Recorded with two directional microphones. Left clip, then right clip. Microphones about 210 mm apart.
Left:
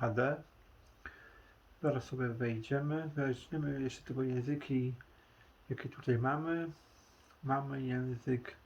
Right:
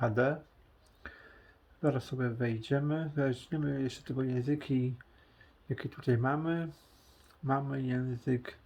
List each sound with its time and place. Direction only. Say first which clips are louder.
0.0 s speech: right 4 dB; 50° right (ahead or behind)
1.0 s a sound: right 2 dB; 55° right (ahead or behind)
1.8 s speech: right 3 dB; 50° right (ahead or behind)